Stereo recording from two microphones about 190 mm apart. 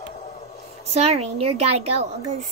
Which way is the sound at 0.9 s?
35° right (ahead or behind).